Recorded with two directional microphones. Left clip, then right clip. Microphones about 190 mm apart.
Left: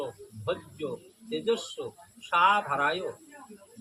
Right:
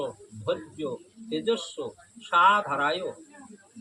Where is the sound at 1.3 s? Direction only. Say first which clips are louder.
Right 1 dB; 25° left (ahead or behind).